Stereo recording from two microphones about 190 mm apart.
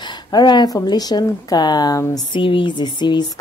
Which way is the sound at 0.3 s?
20° left (ahead or behind).